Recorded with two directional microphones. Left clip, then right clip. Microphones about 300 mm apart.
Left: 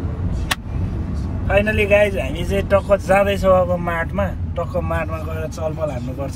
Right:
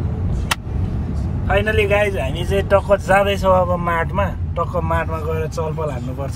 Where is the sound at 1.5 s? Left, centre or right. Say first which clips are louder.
Left 1 dB; centre.